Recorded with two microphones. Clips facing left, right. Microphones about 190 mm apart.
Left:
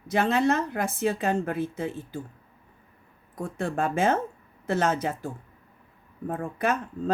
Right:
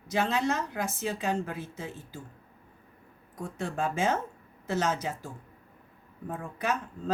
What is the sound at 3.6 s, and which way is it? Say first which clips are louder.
Speech: left 4 dB; 55° left (ahead or behind).